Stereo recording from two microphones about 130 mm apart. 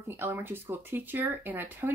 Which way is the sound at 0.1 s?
15° right (ahead or behind).